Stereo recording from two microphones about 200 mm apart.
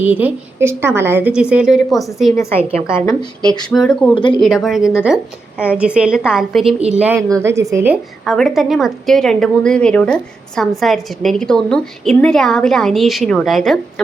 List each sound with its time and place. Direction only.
0.0 s a woman's voice: 10° right (ahead or behind)
2.9 s speech: 15° left (ahead or behind)
3.7 s a woman's voice: 5° left (ahead or behind)
4.1 s speech: 25° left (ahead or behind)
4.4 s a woman's voice: centre (ahead or behind)
8.2 s a woman's voice: centre (ahead or behind)